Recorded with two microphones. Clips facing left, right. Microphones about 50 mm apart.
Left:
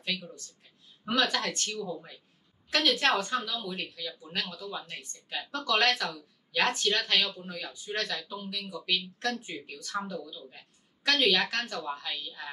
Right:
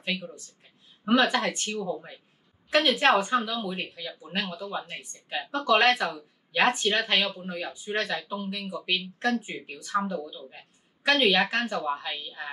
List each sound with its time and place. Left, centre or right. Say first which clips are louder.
0.0 s speech: right 3 dB; centre